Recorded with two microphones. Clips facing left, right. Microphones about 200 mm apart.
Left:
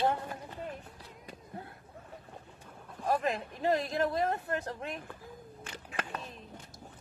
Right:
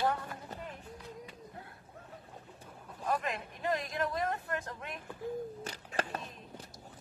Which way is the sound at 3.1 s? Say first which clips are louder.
Left 4 dB; 35° left (ahead or behind).